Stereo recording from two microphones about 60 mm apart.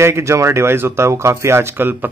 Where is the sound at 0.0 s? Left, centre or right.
Right.